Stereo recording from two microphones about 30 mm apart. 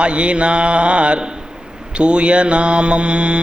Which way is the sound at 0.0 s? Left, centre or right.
Right.